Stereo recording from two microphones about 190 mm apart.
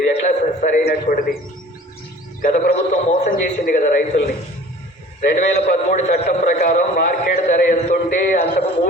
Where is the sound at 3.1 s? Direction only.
45° left (ahead or behind).